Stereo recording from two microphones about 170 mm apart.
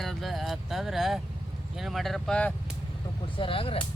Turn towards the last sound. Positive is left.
turn(degrees=35)  # may be behind; listen again after turning